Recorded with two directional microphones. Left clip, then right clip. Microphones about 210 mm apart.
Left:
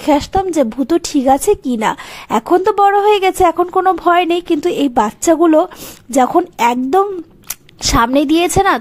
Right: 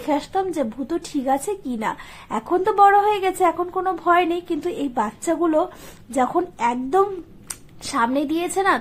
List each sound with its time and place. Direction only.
0.0 s a woman's voice: 40° left (ahead or behind)